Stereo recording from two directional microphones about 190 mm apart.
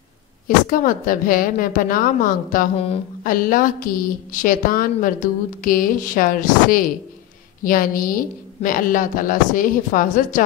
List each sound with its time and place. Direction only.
0.5 s a woman's voice: 45° left (ahead or behind)